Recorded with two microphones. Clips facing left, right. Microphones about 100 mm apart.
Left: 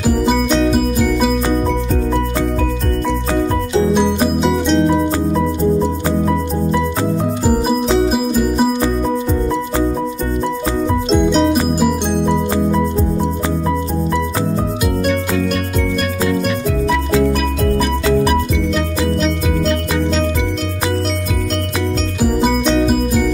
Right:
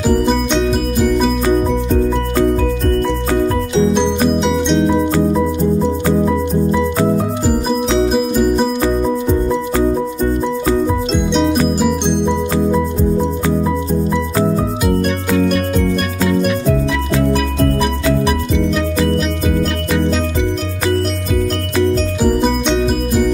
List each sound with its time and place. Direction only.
0.0 s music: 5° left (ahead or behind)
4.4 s music: centre (ahead or behind)
8.1 s music: 5° left (ahead or behind)
11.1 s music: centre (ahead or behind)